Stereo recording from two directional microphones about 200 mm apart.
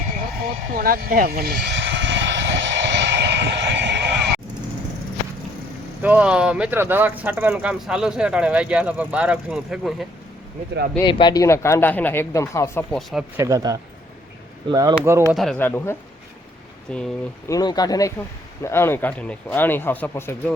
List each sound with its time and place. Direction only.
0.7 s vehicle: 45° right (ahead or behind)
6.0 s speech: 5° right (ahead or behind)
11.0 s speech: 25° left (ahead or behind)
13.0 s speech: centre (ahead or behind)
13.3 s speech: 15° right (ahead or behind)
15.4 s speech: 5° left (ahead or behind)
17.5 s speech: 20° left (ahead or behind)